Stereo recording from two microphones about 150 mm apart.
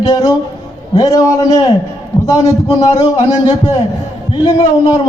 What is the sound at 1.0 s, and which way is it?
A man's voice, 20° left (ahead or behind).